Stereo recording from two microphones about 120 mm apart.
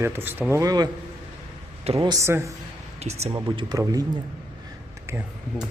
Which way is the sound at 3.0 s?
60° right (ahead or behind).